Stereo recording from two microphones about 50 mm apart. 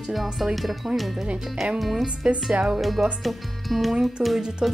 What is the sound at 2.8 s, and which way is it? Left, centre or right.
Speech, centre.